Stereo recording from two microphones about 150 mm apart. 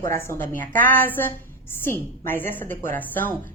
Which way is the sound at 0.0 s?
20° left (ahead or behind).